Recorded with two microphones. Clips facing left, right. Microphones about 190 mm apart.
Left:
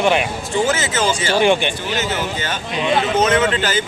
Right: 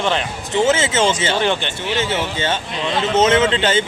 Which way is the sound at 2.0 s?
25° right (ahead or behind).